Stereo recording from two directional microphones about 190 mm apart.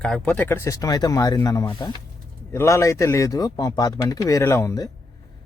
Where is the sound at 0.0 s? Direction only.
5° left (ahead or behind).